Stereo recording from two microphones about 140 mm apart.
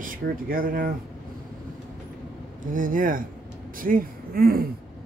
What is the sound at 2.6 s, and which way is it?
Speech, 75° right (ahead or behind).